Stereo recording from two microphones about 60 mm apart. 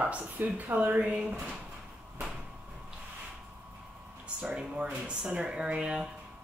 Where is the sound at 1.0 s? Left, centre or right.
Centre.